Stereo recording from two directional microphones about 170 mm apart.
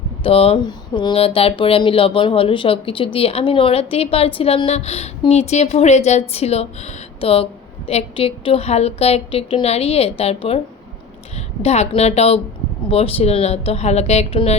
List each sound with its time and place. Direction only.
0.2 s a woman's voice: 35° left (ahead or behind)